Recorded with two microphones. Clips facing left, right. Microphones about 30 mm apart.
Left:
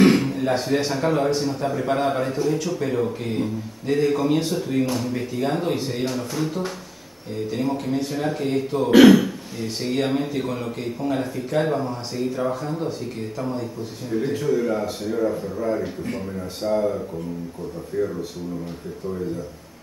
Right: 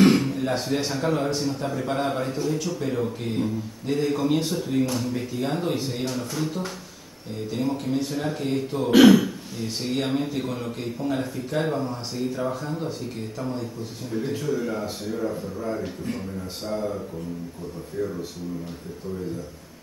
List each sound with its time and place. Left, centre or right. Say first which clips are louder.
0.0 s a man's voice: left 2 dB; centre
15.8 s a man's voice: left 3 dB; centre